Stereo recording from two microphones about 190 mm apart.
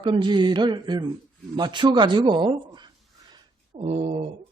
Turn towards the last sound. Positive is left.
turn(degrees=-35)  # may be behind; listen again after turning